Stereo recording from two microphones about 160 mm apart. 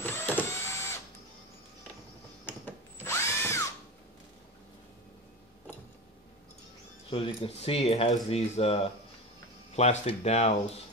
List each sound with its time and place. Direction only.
0.0 s a sound: 10° left (ahead or behind)
2.4 s drill: 15° left (ahead or behind)
7.1 s speech: 35° left (ahead or behind)